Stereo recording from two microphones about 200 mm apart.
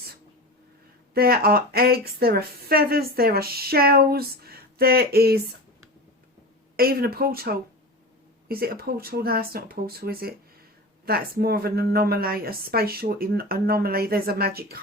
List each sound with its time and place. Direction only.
1.1 s a woman's voice: 50° right (ahead or behind)
6.7 s a woman's voice: 50° right (ahead or behind)